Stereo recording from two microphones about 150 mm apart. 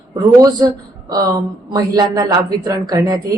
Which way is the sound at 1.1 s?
30° right (ahead or behind).